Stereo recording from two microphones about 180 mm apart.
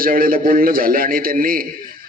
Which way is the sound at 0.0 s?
55° right (ahead or behind).